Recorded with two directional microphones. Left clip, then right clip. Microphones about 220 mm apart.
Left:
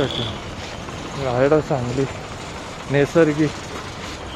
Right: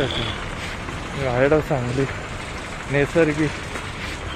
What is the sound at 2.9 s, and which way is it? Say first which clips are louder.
Speech: left 2 dB; 15° left (ahead or behind).